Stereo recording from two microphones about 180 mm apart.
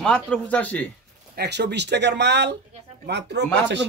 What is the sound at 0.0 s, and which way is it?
Speech, 5° left (ahead or behind).